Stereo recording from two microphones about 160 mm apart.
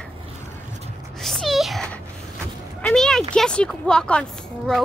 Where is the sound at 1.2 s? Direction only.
Centre (ahead or behind).